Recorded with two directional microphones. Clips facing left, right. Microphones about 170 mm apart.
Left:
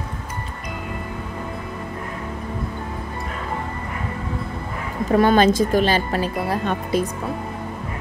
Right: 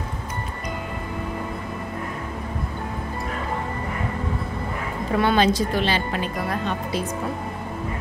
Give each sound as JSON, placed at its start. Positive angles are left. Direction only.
{"t": 5.1, "sound": "speech", "side_deg": 45}